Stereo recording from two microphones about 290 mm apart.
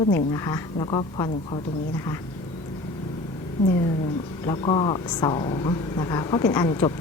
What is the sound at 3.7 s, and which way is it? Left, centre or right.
Speech, centre.